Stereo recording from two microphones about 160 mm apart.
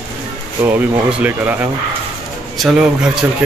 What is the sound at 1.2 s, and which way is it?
Speech, 10° right (ahead or behind).